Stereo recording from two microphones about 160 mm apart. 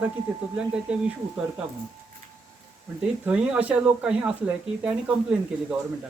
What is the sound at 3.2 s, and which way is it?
Speech, 10° right (ahead or behind).